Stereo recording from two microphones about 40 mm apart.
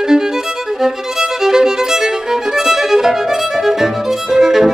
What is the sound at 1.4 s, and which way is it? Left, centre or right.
Violin, centre.